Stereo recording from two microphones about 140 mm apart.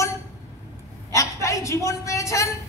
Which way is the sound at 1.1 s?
20° left (ahead or behind).